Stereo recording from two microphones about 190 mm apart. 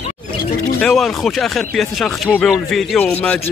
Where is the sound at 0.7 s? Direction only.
Centre (ahead or behind).